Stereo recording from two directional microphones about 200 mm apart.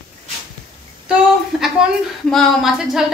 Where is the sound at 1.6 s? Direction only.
Centre (ahead or behind).